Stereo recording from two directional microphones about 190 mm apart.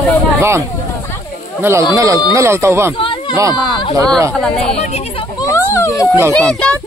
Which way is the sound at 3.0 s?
25° left (ahead or behind).